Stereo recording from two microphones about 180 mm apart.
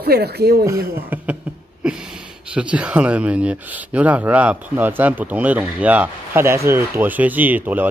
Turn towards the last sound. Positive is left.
turn(degrees=-10)  # may be behind; listen again after turning